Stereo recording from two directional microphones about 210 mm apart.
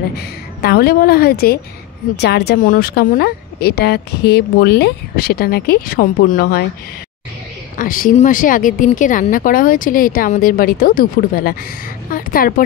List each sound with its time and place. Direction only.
0.6 s speech: 50° left (ahead or behind)
7.7 s a woman's voice: 40° left (ahead or behind)